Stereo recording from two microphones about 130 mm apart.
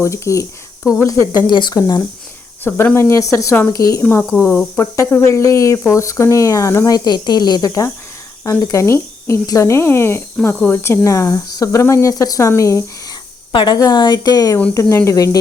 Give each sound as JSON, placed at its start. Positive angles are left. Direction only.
{"t": 0.0, "sound": "speech", "side_deg": 20}
{"t": 1.5, "sound": "speech", "side_deg": 35}
{"t": 2.6, "sound": "speech", "side_deg": 15}
{"t": 4.0, "sound": "speech", "side_deg": 10}
{"t": 13.5, "sound": "speech", "side_deg": 35}